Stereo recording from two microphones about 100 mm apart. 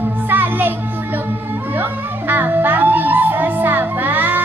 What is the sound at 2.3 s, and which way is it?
Music, 20° right (ahead or behind).